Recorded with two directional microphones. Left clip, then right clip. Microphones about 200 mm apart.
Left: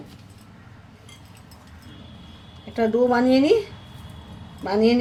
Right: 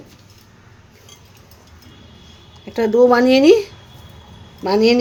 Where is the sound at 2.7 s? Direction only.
55° right (ahead or behind).